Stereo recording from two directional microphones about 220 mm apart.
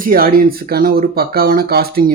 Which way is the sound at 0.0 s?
40° right (ahead or behind).